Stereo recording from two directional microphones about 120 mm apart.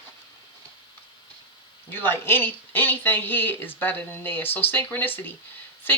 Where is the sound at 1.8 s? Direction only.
20° left (ahead or behind).